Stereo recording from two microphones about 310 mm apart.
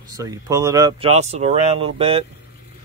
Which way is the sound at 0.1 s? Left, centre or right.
Centre.